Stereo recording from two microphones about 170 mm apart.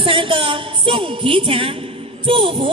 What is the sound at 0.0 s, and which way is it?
Music, 30° right (ahead or behind).